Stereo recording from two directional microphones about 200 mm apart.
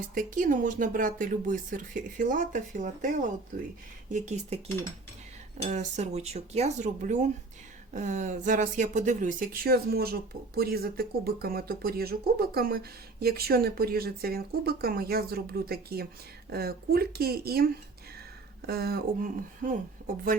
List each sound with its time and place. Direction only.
0.1 s speech: 40° right (ahead or behind)
4.1 s speech: 35° right (ahead or behind)
5.6 s speech: 35° right (ahead or behind)